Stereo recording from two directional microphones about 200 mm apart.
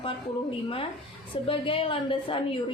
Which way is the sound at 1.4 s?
25° left (ahead or behind).